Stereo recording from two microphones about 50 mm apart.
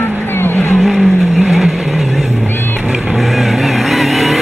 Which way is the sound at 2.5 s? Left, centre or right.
Left.